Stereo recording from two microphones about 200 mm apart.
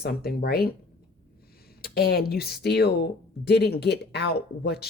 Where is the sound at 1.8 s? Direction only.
50° left (ahead or behind).